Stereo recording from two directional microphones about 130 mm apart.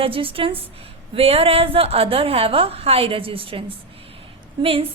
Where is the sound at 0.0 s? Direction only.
45° right (ahead or behind).